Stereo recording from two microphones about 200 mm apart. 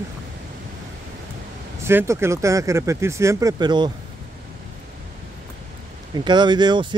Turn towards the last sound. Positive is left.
turn(degrees=-20)  # may be behind; listen again after turning